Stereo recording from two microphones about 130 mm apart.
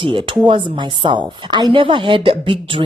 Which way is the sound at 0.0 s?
40° right (ahead or behind).